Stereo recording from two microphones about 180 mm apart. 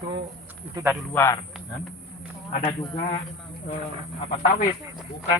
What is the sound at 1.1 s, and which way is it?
Speech, 15° left (ahead or behind).